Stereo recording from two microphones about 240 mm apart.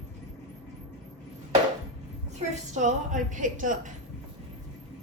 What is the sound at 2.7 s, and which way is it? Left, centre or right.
A woman's voice, right.